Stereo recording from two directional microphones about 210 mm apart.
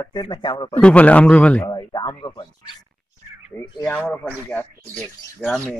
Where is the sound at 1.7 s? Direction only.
15° left (ahead or behind).